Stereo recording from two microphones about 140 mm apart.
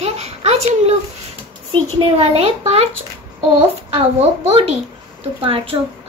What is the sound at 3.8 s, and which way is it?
A child's voice, 45° right (ahead or behind).